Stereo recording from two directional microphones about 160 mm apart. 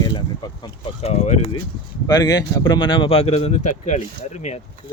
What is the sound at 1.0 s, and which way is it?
Speech, 45° left (ahead or behind).